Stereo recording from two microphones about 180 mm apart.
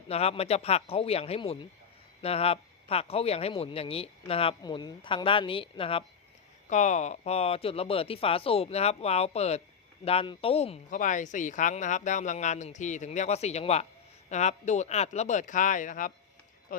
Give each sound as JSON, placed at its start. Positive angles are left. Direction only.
{"t": 0.1, "sound": "speech", "side_deg": 35}
{"t": 6.7, "sound": "speech", "side_deg": 40}